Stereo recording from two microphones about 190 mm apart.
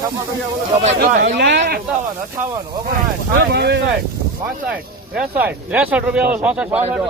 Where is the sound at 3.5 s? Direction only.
60° right (ahead or behind).